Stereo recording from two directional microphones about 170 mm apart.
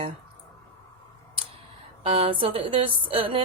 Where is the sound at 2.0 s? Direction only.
30° right (ahead or behind).